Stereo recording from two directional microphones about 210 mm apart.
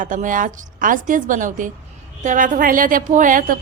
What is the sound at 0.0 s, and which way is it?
A woman's voice, 40° right (ahead or behind).